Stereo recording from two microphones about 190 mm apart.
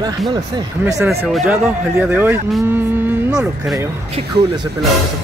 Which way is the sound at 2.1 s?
10° right (ahead or behind).